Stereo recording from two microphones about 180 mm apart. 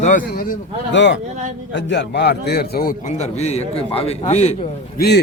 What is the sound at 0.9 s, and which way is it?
A man's voice, 85° left.